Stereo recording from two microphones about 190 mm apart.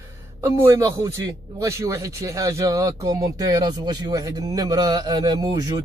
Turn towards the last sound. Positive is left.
turn(degrees=-20)  # may be behind; listen again after turning